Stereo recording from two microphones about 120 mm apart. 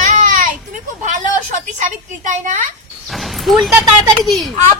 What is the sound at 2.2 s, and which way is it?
Speech, 90° right.